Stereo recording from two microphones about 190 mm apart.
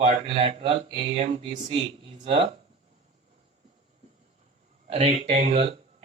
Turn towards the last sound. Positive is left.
turn(degrees=-30)  # may be behind; listen again after turning